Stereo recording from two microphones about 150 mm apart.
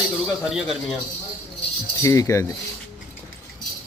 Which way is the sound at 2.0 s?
20° left (ahead or behind).